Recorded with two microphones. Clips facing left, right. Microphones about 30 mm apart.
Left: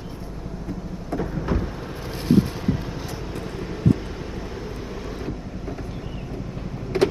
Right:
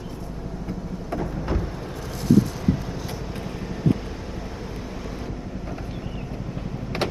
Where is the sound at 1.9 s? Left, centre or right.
Left.